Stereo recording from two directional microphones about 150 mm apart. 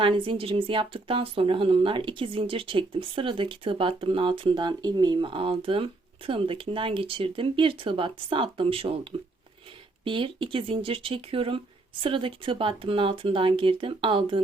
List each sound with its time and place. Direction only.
0.0 s a woman's voice: 35° right (ahead or behind)
10.0 s a woman's voice: 35° right (ahead or behind)